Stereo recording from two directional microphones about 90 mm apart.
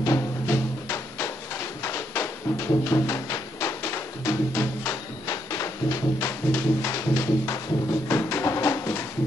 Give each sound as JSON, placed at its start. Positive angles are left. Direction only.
{"t": 0.0, "sound": "music", "side_deg": 35}
{"t": 5.3, "sound": "music", "side_deg": 40}
{"t": 8.1, "sound": "a sound", "side_deg": 30}